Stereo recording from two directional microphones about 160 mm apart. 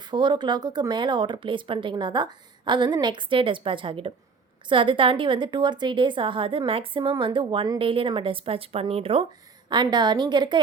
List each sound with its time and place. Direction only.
0.0 s a woman's voice: 30° right (ahead or behind)